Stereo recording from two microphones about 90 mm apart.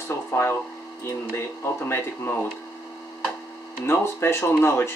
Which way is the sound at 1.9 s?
25° left (ahead or behind).